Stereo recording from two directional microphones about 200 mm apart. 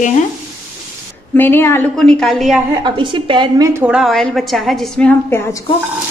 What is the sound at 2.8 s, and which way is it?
Speech, 25° right (ahead or behind).